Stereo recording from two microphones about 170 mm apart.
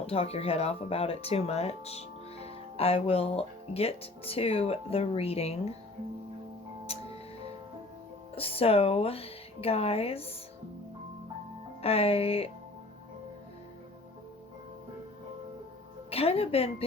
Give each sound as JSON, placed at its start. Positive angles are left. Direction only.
{"t": 0.1, "sound": "speech", "side_deg": 35}
{"t": 8.4, "sound": "speech", "side_deg": 35}
{"t": 11.8, "sound": "speech", "side_deg": 35}
{"t": 16.0, "sound": "speech", "side_deg": 35}